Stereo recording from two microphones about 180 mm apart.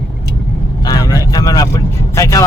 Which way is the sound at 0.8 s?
20° left (ahead or behind).